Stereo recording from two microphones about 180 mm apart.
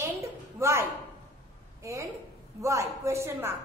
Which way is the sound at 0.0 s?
15° right (ahead or behind).